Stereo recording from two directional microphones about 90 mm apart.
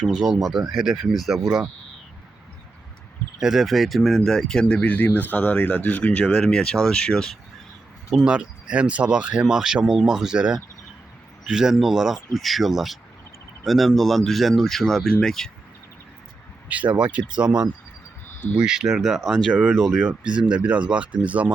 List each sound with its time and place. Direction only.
0.0 s speech: 5° right (ahead or behind)
3.4 s speech: centre (ahead or behind)
8.1 s speech: 10° right (ahead or behind)
16.6 s speech: 15° right (ahead or behind)
18.5 s speech: 10° right (ahead or behind)
20.5 s speech: 15° right (ahead or behind)